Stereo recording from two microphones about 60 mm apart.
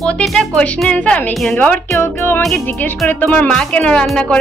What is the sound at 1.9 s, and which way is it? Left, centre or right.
Speech, left.